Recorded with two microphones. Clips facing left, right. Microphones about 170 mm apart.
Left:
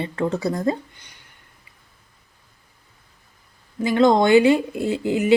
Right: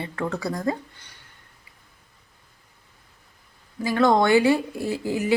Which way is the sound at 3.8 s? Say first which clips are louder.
Left 3 dB; 20° left (ahead or behind).